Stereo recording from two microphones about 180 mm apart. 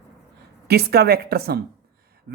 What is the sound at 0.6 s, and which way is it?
Speech, 60° right (ahead or behind).